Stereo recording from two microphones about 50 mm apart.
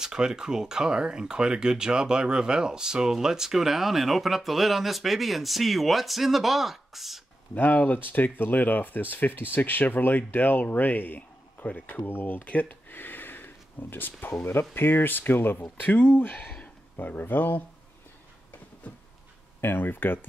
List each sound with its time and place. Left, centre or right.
0.0 s speech: centre
7.5 s speech: left
12.4 s a sound: left
14.4 s speech: left
19.6 s speech: left